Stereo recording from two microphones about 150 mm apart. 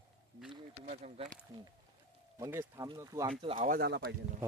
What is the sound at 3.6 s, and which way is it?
Speech, 70° right (ahead or behind).